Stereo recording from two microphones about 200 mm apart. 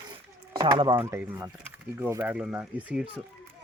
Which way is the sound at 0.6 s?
25° right (ahead or behind).